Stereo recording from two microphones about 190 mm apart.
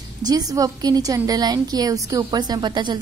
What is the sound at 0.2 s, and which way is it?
A woman's voice, 20° right (ahead or behind).